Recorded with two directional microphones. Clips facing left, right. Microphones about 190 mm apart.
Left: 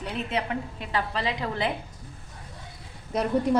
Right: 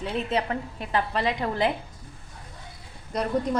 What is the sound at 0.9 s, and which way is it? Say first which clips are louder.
Speech: right 3 dB; 50° right (ahead or behind).